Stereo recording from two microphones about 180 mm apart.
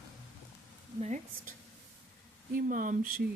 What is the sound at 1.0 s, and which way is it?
Speech, 45° right (ahead or behind).